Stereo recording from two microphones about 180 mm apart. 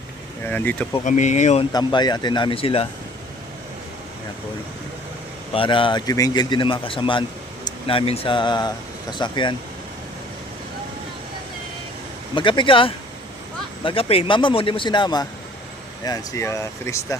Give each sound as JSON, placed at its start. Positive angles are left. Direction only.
{"t": 0.4, "sound": "speech", "side_deg": 10}
{"t": 1.0, "sound": "speech", "side_deg": 40}
{"t": 1.7, "sound": "speech", "side_deg": 25}
{"t": 5.5, "sound": "speech", "side_deg": 30}
{"t": 12.3, "sound": "speech", "side_deg": 25}